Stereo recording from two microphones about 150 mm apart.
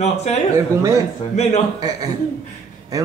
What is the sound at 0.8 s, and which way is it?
Speech, 20° right (ahead or behind).